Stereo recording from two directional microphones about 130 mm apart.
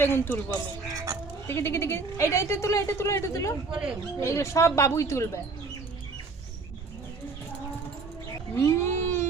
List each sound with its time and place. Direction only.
0.0 s speech: 15° left (ahead or behind)
3.7 s speech: 5° right (ahead or behind)
4.2 s speech: 20° left (ahead or behind)
8.5 s a sound: 20° left (ahead or behind)